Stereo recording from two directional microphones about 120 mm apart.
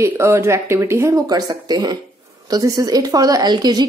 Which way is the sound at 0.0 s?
20° right (ahead or behind).